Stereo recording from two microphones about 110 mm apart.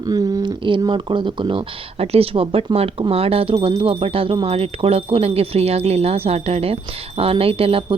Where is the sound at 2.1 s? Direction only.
60° right (ahead or behind).